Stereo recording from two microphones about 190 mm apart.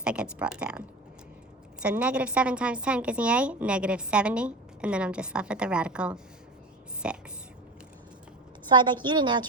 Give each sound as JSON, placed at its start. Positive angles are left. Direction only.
{"t": 0.0, "sound": "a woman's voice", "side_deg": -5}
{"t": 8.7, "sound": "a woman's voice", "side_deg": -25}